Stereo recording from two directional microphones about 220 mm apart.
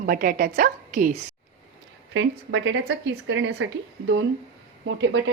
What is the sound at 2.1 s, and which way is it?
A woman's voice, 60° right (ahead or behind).